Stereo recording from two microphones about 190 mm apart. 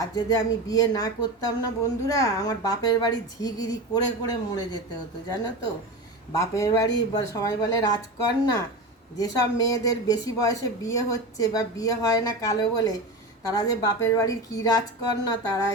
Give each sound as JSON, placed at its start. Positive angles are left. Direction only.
{"t": 0.0, "sound": "speech", "side_deg": 20}
{"t": 6.3, "sound": "speech", "side_deg": 15}
{"t": 9.1, "sound": "speech", "side_deg": 20}